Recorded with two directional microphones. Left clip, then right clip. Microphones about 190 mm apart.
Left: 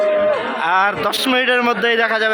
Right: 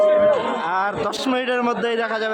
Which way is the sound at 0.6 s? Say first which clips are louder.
Left 6 dB; 5° left (ahead or behind).